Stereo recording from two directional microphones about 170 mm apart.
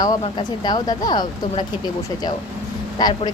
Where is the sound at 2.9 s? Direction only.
25° left (ahead or behind).